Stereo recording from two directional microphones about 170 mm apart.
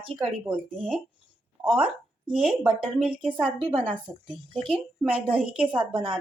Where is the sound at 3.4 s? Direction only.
30° right (ahead or behind).